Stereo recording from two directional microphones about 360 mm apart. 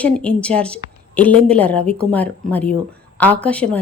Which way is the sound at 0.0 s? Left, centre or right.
Centre.